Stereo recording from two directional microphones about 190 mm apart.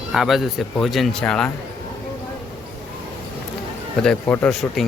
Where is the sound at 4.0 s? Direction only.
5° left (ahead or behind).